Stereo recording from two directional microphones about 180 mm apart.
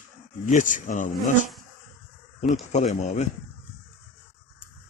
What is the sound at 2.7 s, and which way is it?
Speech, 40° left (ahead or behind).